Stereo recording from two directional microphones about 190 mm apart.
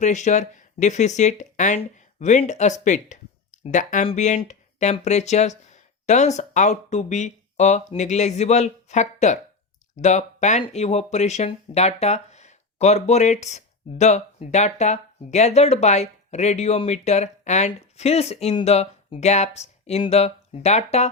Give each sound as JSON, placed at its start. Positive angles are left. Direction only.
{"t": 0.0, "sound": "speech", "side_deg": 40}